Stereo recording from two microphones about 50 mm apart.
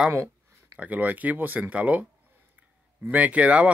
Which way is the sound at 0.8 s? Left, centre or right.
Right.